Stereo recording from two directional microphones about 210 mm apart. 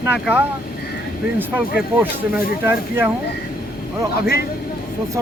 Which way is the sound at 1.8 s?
5° right (ahead or behind).